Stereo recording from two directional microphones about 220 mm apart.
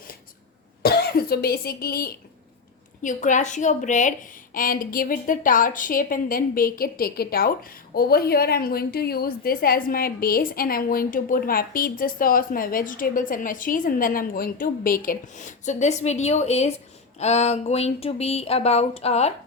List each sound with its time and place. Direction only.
0.8 s a woman's voice: 45° left (ahead or behind)